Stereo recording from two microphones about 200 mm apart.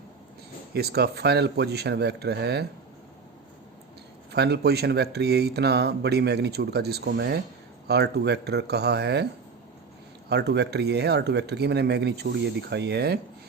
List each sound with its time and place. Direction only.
0.7 s speech: 55° right (ahead or behind)
4.3 s speech: 55° right (ahead or behind)
10.2 s speech: 55° right (ahead or behind)